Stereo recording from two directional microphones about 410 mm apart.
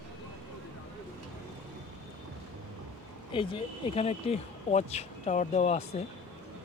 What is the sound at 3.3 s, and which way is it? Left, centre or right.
Speech, centre.